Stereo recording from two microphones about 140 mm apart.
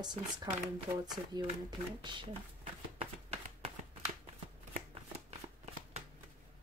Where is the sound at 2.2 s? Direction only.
60° right (ahead or behind).